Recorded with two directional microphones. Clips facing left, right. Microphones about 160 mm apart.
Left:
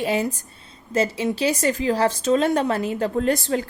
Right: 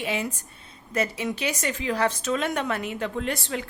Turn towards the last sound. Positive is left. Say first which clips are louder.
# left 8 dB
turn(degrees=40)  # may be behind; listen again after turning